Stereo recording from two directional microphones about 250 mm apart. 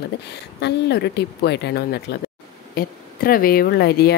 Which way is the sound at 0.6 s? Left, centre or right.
Left.